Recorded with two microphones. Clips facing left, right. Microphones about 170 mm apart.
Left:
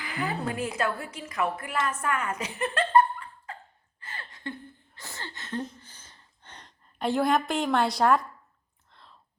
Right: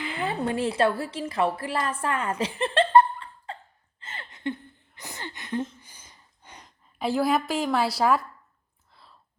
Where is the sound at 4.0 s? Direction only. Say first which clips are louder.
Right 6 dB; 20° right (ahead or behind).